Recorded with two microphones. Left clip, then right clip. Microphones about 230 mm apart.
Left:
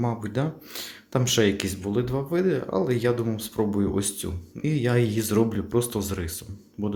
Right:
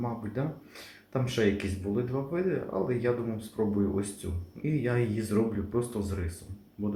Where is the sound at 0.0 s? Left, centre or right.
Left.